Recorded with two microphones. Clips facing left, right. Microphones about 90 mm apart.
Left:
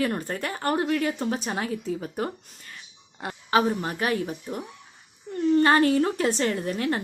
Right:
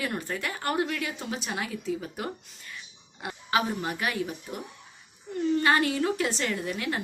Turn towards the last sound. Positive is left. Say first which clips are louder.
# left 4 dB
turn(degrees=40)  # may be behind; listen again after turning